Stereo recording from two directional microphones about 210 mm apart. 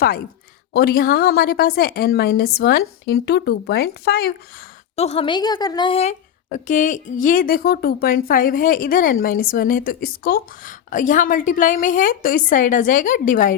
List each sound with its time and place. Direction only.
0.7 s a woman's voice: 50° left (ahead or behind)
4.9 s a woman's voice: 30° left (ahead or behind)